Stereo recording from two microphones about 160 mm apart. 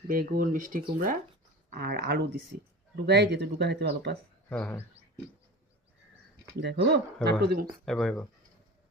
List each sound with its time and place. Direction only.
0.1 s speech: 65° right (ahead or behind)
1.8 s speech: 75° right (ahead or behind)
2.9 s speech: 90° right
4.4 s speech: 10° left (ahead or behind)
6.6 s speech: 90° right
7.4 s speech: 70° right (ahead or behind)
7.9 s speech: centre (ahead or behind)